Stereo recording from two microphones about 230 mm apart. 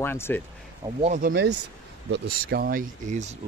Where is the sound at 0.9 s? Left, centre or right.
Right.